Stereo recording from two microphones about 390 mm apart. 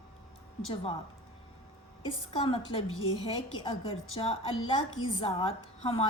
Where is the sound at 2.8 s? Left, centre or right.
Left.